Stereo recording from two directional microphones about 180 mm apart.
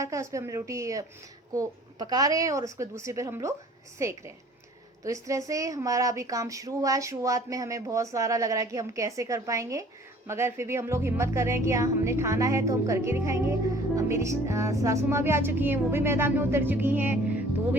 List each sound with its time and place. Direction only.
0.0 s a woman's voice: 15° right (ahead or behind)